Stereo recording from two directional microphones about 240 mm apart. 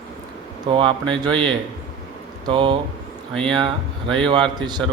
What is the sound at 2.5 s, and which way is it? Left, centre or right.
Speech, right.